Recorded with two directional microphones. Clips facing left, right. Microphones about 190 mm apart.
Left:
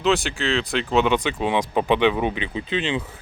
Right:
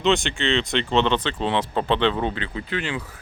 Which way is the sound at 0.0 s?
Centre (ahead or behind).